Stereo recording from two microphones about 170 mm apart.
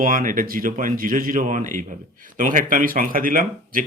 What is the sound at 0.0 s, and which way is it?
Speech, 55° right (ahead or behind).